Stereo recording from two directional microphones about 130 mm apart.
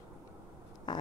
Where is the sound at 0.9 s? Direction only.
35° left (ahead or behind).